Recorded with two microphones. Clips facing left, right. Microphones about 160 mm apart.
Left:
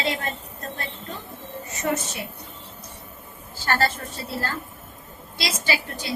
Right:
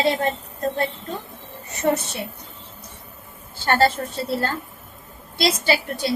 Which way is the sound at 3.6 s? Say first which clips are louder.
Right 5 dB; 30° right (ahead or behind).